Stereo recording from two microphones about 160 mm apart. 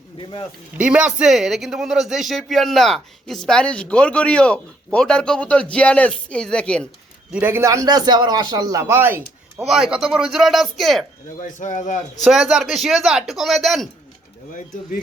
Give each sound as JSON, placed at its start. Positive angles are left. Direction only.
{"t": 0.2, "sound": "speech", "side_deg": 30}
{"t": 0.8, "sound": "speech", "side_deg": -5}
{"t": 7.3, "sound": "a man's voice", "side_deg": -15}
{"t": 9.6, "sound": "speech", "side_deg": -5}
{"t": 11.3, "sound": "a man's voice", "side_deg": 50}
{"t": 12.2, "sound": "speech", "side_deg": 0}